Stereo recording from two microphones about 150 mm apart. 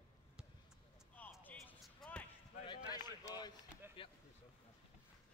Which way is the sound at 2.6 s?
30° left (ahead or behind).